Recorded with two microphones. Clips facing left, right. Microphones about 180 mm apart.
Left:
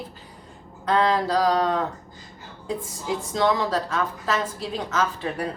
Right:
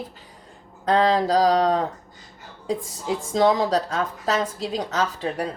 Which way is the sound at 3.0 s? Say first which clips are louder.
Right 3 dB; 40° right (ahead or behind).